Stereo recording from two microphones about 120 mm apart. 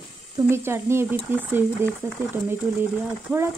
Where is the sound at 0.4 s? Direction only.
20° right (ahead or behind).